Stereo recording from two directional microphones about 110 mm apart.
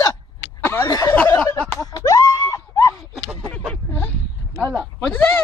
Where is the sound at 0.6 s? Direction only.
20° left (ahead or behind).